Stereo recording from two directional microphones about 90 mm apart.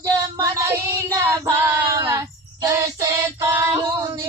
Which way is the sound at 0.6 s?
30° right (ahead or behind).